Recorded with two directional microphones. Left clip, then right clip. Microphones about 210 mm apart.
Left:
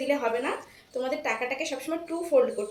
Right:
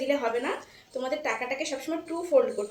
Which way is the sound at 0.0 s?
Centre (ahead or behind).